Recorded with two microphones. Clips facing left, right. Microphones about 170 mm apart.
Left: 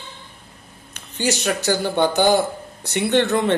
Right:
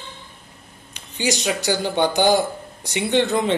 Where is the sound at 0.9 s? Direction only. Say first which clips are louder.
Left 1 dB; 15° right (ahead or behind).